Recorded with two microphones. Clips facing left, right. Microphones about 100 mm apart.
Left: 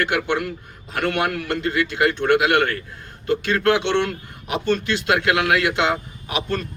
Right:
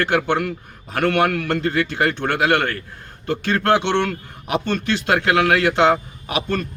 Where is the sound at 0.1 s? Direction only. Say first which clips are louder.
Right 3 dB; 40° right (ahead or behind); by 4.0 s 25° right (ahead or behind).